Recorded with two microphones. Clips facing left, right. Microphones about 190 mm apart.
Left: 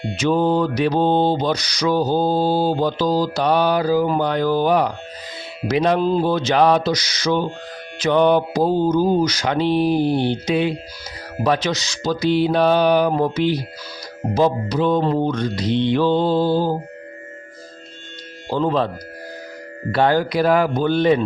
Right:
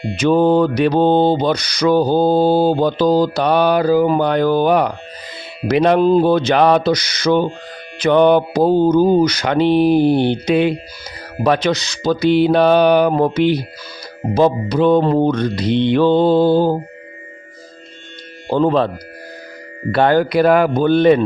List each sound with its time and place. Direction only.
0.2 s mantra: 60° right (ahead or behind)
18.5 s mantra: 60° right (ahead or behind)
19.9 s mantra: 60° right (ahead or behind)